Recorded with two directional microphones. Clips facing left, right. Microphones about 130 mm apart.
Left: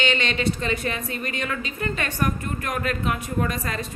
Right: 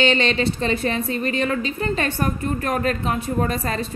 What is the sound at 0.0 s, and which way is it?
A woman's voice, 35° right (ahead or behind).